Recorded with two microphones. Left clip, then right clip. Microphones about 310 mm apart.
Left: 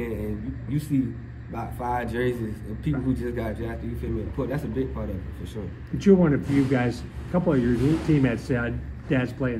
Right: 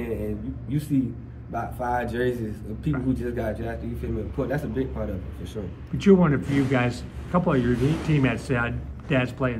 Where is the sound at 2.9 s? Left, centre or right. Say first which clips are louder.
Right 1 dB; right.